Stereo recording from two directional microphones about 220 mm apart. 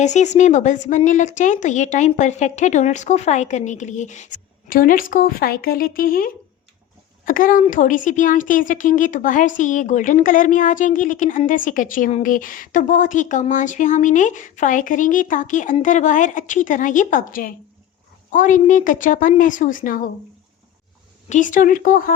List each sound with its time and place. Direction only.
0.0 s a woman's voice: 30° left (ahead or behind)
21.2 s a woman's voice: 35° left (ahead or behind)